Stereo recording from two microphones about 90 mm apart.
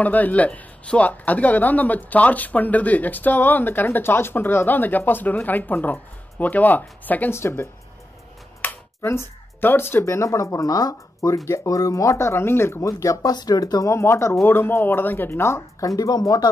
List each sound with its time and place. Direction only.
0.0 s a man's voice: 15° left (ahead or behind)
8.6 s speech: 30° left (ahead or behind)
16.0 s speech: 45° left (ahead or behind)